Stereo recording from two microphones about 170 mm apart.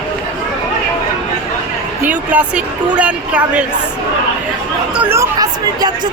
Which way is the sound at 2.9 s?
10° right (ahead or behind).